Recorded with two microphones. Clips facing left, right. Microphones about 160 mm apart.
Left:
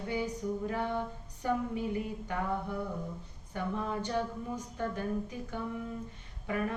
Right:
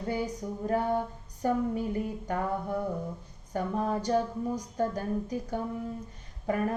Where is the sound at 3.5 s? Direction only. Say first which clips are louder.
Right 5 dB; 40° right (ahead or behind).